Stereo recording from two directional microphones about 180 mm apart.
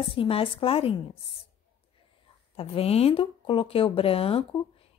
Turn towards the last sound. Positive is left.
turn(degrees=30)  # may be behind; listen again after turning